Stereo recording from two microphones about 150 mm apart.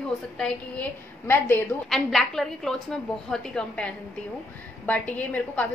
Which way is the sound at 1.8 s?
Centre (ahead or behind).